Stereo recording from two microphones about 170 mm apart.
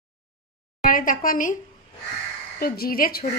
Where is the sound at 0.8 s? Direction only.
55° left (ahead or behind).